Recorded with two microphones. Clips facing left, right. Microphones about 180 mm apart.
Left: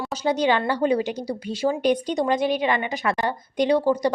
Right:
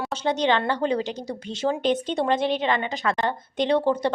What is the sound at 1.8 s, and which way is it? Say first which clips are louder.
Speech: left 2 dB; 25° right (ahead or behind).